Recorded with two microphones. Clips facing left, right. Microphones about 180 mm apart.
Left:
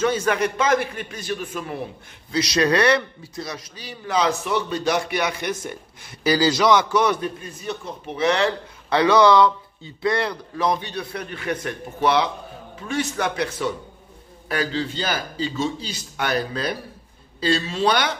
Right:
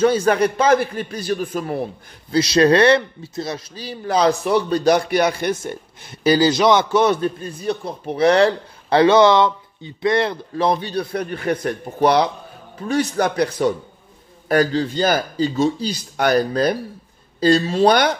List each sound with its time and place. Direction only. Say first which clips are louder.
0.0 s a man's voice: right 5 dB; 35° right (ahead or behind)